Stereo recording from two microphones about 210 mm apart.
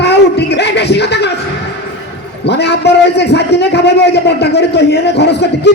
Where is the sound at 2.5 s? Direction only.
55° left (ahead or behind).